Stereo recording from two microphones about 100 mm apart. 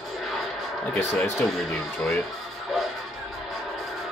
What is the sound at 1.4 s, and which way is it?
Speech, 5° left (ahead or behind).